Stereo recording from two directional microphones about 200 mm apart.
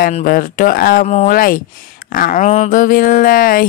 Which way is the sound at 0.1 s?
45° left (ahead or behind).